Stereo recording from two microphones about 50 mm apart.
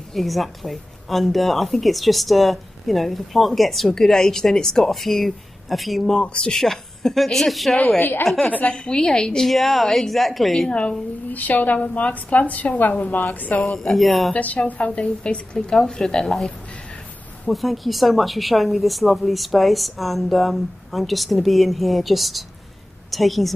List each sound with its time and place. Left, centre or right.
0.1 s a woman's voice: centre
6.2 s a woman's voice: left
6.5 s a woman's voice: centre
8.5 s a woman's voice: left
9.5 s a woman's voice: centre
10.7 s a woman's voice: left
11.2 s a woman's voice: left
13.7 s a woman's voice: centre
14.3 s a woman's voice: left
15.5 s a woman's voice: centre
17.5 s a woman's voice: centre